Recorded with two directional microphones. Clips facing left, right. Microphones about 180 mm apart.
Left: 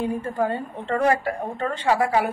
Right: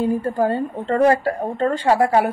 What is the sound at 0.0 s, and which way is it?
A woman's voice, 35° right (ahead or behind).